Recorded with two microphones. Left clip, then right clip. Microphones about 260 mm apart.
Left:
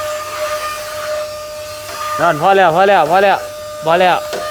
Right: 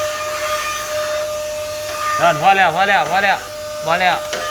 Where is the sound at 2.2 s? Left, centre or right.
Left.